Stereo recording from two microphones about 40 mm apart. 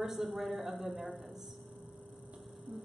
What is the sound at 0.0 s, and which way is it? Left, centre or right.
A man's voice, centre.